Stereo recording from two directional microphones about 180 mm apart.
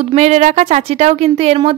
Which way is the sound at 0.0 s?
35° right (ahead or behind).